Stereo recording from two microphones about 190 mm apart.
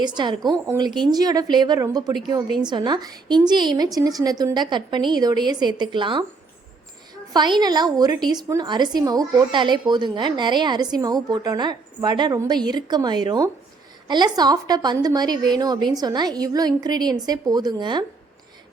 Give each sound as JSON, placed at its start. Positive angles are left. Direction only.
{"t": 0.0, "sound": "a woman's voice", "side_deg": -25}
{"t": 7.3, "sound": "a woman's voice", "side_deg": -25}